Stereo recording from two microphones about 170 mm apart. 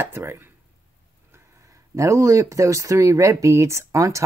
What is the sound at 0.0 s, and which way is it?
Speech, 15° right (ahead or behind).